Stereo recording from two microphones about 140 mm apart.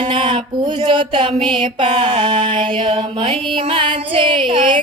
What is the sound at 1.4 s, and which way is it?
Mantra, 35° right (ahead or behind).